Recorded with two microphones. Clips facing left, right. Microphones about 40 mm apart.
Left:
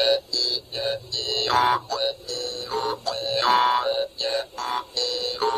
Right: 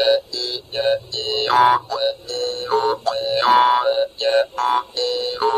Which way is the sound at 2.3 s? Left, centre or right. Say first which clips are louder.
Right 8 dB; right.